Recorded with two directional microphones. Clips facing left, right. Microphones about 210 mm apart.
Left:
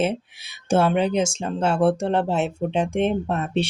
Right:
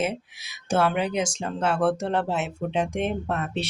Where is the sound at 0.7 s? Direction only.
25° left (ahead or behind).